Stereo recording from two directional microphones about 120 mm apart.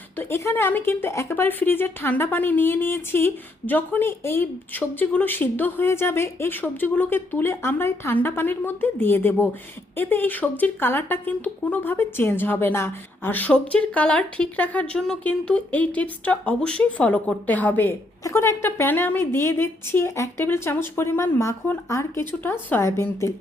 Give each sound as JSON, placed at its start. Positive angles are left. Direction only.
{"t": 0.2, "sound": "a woman's voice", "side_deg": 20}